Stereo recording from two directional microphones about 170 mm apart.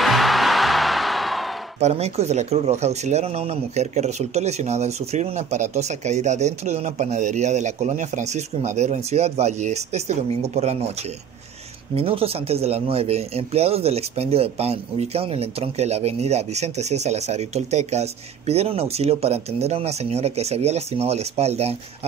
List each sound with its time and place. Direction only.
0.0 s music: centre (ahead or behind)
1.8 s speech: 40° right (ahead or behind)
11.9 s speech: 35° right (ahead or behind)